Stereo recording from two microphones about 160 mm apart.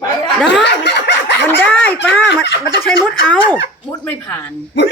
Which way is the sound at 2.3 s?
90° left.